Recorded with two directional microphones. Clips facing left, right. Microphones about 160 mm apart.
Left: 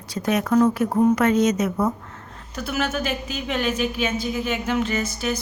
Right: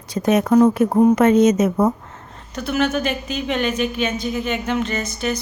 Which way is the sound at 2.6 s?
5° left (ahead or behind).